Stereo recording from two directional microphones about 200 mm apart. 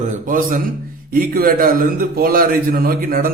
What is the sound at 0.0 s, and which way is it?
A man's voice, 40° right (ahead or behind).